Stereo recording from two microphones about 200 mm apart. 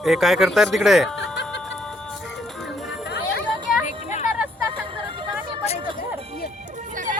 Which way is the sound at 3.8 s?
35° left (ahead or behind).